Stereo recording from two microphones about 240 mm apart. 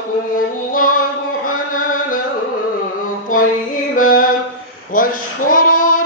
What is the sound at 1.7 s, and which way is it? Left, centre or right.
Chant, left.